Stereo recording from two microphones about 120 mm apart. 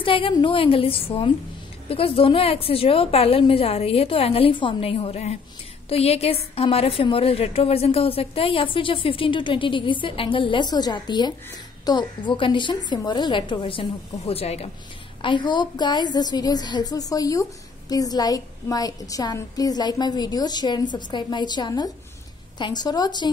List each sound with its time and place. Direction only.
0.0 s a woman's voice: 45° left (ahead or behind)
15.2 s a woman's voice: 40° left (ahead or behind)